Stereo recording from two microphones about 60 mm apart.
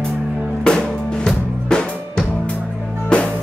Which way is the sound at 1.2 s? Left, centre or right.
Centre.